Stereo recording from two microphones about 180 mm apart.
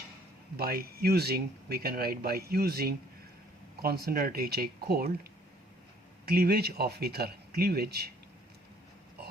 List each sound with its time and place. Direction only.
0.5 s speech: 60° right (ahead or behind)
6.2 s speech: 60° right (ahead or behind)